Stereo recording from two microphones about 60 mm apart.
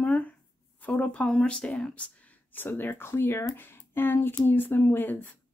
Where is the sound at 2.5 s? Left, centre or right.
Left.